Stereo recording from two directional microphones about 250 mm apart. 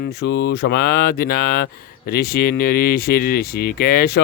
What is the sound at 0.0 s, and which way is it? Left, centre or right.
Mantra, left.